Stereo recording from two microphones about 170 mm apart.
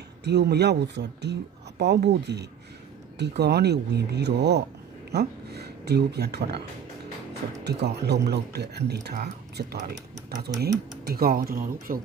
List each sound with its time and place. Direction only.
0.2 s speech: 80° right
7.6 s speech: 75° right (ahead or behind); by 12.0 s 60° right (ahead or behind)